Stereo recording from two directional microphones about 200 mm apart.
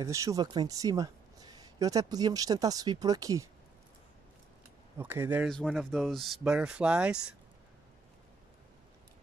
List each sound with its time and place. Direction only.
0.0 s speech: 15° right (ahead or behind)
4.9 s speech: 10° right (ahead or behind)
5.5 s speech: centre (ahead or behind)